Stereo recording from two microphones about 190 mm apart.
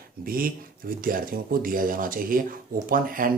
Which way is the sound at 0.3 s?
50° right (ahead or behind).